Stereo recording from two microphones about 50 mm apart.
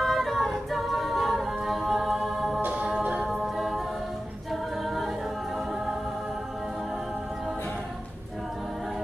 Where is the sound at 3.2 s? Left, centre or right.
Centre.